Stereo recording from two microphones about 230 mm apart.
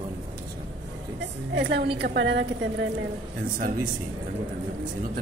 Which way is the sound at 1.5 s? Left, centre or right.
Right.